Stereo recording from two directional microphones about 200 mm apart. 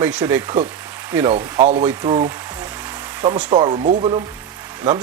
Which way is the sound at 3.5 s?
30° right (ahead or behind).